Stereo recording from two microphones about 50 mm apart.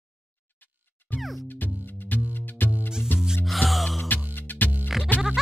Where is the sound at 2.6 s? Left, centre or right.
Left.